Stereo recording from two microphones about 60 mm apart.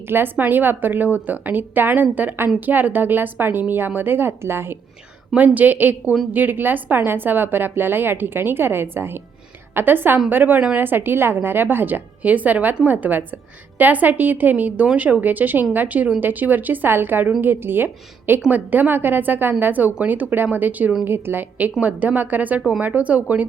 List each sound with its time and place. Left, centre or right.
0.1 s a woman's voice: right
5.3 s a woman's voice: right
21.8 s a woman's voice: right